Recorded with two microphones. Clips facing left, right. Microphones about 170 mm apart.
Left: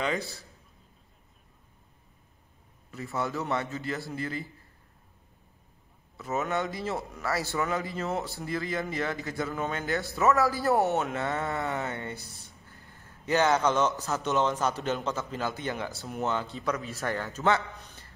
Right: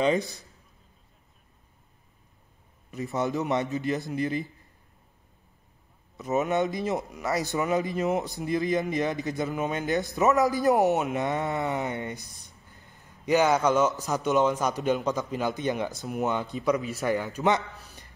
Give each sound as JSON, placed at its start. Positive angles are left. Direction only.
{"t": 0.0, "sound": "a man's voice", "side_deg": -20}
{"t": 2.9, "sound": "a man's voice", "side_deg": -20}
{"t": 6.1, "sound": "speech", "side_deg": -20}